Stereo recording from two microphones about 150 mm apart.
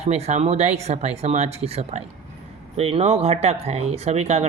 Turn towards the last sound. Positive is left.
turn(degrees=-45)  # may be behind; listen again after turning